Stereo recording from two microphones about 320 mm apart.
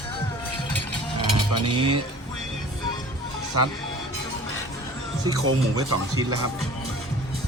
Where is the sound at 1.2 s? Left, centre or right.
Right.